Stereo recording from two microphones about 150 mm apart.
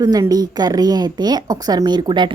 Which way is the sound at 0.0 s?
25° right (ahead or behind).